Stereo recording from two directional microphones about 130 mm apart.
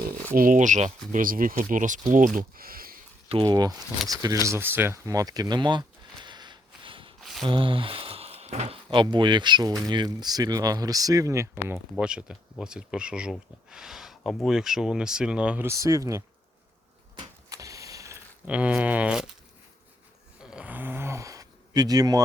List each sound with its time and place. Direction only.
0.3 s speech: 90° right
3.4 s speech: 30° right (ahead or behind)
6.2 s a sound: 35° right (ahead or behind)
7.2 s a sound: centre (ahead or behind)
7.4 s speech: 40° right (ahead or behind); by 11.6 s 25° right (ahead or behind)
11.9 s speech: 5° right (ahead or behind)
15.6 s speech: 25° right (ahead or behind)
17.2 s vehicle: 25° right (ahead or behind)
18.4 s speech: 10° right (ahead or behind)
20.4 s gasp: 5° right (ahead or behind); by 22.2 s 30° right (ahead or behind)